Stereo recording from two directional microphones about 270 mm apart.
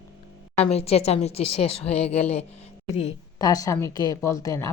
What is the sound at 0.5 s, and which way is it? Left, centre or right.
A woman's voice, left.